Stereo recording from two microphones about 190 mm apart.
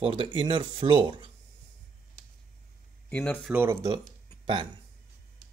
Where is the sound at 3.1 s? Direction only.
10° left (ahead or behind).